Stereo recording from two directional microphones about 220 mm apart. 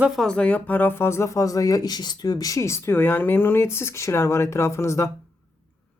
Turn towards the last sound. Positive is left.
turn(degrees=15)  # may be behind; listen again after turning